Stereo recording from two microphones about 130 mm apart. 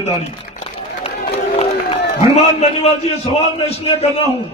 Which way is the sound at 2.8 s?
50° left (ahead or behind).